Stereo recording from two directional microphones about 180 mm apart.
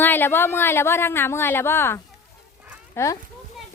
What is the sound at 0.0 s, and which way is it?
Speech, 10° left (ahead or behind).